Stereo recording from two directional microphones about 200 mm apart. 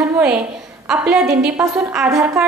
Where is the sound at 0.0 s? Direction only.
15° right (ahead or behind).